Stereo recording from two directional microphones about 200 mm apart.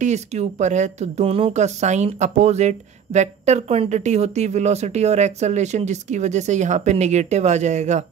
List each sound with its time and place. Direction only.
0.0 s speech: 35° right (ahead or behind)